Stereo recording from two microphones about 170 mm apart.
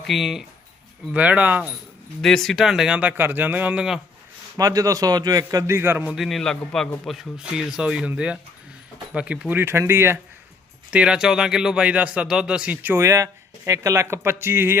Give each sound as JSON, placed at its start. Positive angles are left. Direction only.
{"t": 0.1, "sound": "a man's voice", "side_deg": 0}
{"t": 2.2, "sound": "a man's voice", "side_deg": 0}
{"t": 4.5, "sound": "a man's voice", "side_deg": -20}